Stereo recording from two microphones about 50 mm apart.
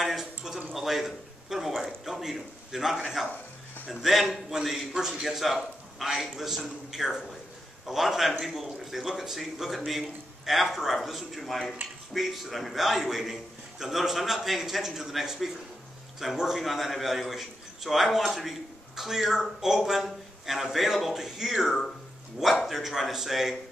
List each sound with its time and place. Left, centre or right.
0.0 s a sound: centre
0.7 s a man's voice: centre
3.3 s music: left
4.0 s a man's voice: centre